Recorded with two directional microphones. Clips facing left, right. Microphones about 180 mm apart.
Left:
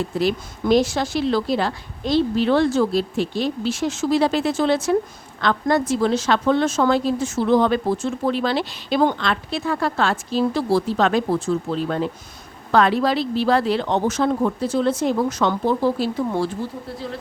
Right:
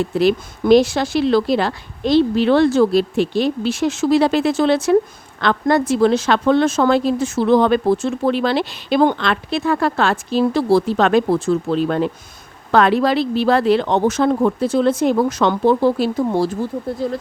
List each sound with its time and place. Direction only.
0.2 s a woman's voice: 70° right (ahead or behind)
16.3 s speech: 40° right (ahead or behind)